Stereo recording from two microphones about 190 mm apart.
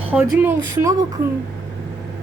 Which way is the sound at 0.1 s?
10° right (ahead or behind).